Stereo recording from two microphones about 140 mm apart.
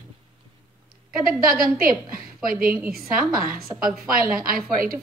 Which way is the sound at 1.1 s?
90° right.